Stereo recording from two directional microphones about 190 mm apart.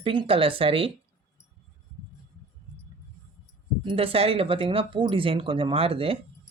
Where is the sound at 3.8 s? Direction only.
25° right (ahead or behind).